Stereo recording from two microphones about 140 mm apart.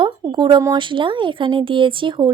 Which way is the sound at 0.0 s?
35° right (ahead or behind).